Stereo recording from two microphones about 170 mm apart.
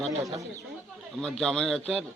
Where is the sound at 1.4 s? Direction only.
Centre (ahead or behind).